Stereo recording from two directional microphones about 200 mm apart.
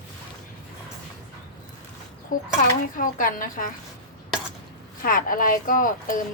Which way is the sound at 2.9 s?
45° left (ahead or behind).